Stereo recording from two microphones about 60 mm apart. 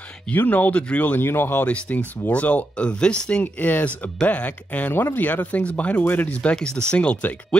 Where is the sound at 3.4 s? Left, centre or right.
Left.